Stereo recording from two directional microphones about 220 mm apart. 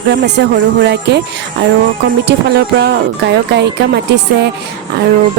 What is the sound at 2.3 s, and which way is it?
Speech, 50° right (ahead or behind).